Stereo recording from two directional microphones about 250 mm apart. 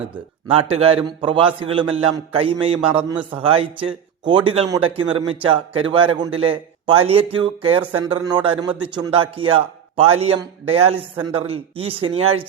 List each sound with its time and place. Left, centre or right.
0.7 s speech: right
3.0 s a man's voice: centre
3.3 s speech: right